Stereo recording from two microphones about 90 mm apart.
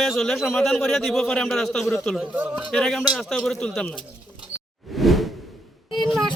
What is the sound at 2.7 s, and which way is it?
Speech, 5° left (ahead or behind).